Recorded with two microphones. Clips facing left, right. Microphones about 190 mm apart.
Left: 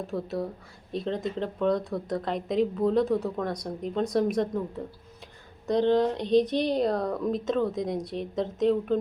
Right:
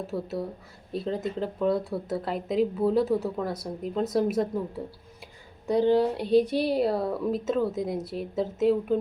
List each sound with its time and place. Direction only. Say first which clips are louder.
0.1 s speech: even; centre (ahead or behind)